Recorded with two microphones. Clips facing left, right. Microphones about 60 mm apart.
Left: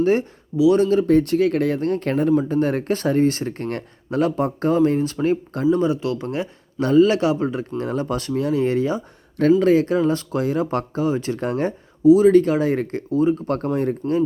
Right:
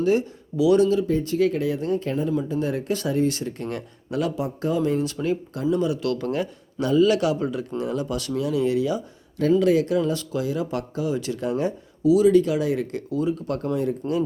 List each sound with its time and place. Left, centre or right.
0.0 s speech: left
1.0 s speech: left
7.8 s speech: left
12.0 s speech: left
14.0 s speech: left